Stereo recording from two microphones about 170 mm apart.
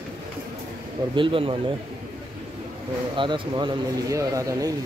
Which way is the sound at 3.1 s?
30° right (ahead or behind).